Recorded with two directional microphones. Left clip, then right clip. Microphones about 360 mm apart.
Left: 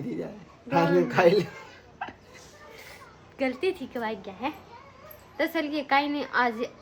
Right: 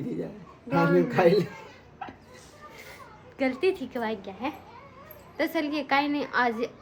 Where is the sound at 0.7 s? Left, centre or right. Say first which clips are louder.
Left 1 dB; centre.